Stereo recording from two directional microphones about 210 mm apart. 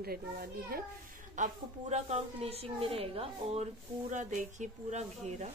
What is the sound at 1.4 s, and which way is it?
A woman's voice, 30° right (ahead or behind).